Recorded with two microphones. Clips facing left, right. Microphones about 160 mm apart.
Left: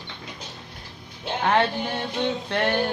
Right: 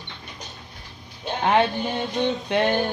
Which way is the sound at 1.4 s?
15° right (ahead or behind).